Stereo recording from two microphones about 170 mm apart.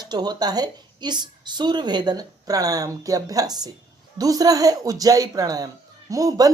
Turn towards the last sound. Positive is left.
turn(degrees=-20)  # may be behind; listen again after turning